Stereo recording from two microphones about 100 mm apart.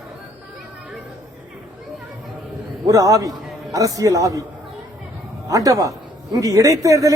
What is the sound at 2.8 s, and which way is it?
A man's voice, 35° right (ahead or behind).